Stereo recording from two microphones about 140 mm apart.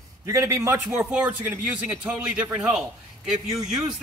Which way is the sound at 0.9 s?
5° right (ahead or behind).